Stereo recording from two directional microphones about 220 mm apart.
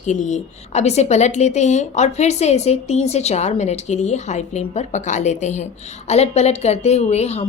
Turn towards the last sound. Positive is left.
turn(degrees=30)  # may be behind; listen again after turning